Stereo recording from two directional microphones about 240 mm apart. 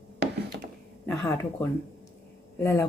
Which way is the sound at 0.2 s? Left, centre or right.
Right.